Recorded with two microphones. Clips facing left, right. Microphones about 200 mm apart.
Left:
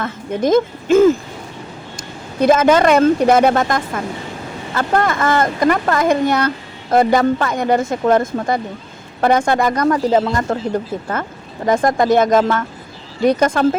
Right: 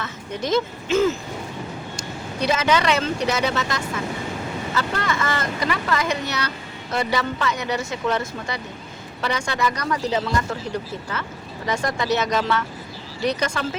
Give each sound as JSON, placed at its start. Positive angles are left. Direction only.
{"t": 0.0, "sound": "a woman's voice", "side_deg": 50}
{"t": 2.4, "sound": "speech", "side_deg": 50}